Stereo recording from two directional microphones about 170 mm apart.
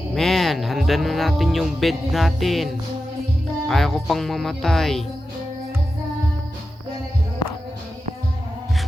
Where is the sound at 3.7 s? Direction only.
Centre (ahead or behind).